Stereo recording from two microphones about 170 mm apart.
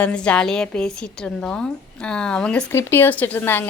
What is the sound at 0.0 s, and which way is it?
A woman's voice, 5° left (ahead or behind).